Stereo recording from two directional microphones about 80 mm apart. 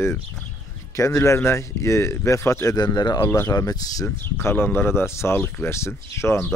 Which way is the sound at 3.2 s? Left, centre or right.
Left.